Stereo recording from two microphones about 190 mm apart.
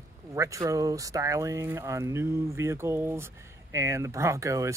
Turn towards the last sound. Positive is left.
turn(degrees=-15)  # may be behind; listen again after turning